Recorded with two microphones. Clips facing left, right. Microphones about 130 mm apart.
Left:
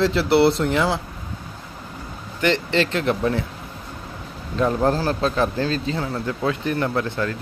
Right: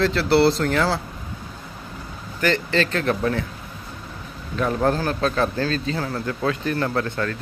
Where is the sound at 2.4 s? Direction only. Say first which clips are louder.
Left 1 dB; 25° left (ahead or behind).